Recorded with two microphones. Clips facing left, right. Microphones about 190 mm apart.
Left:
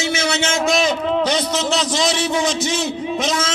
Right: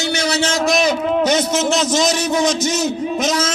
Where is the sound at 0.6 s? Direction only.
Centre (ahead or behind).